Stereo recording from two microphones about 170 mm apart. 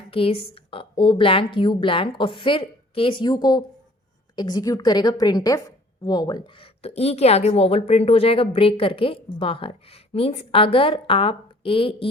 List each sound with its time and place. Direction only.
0.1 s a woman's voice: 35° left (ahead or behind)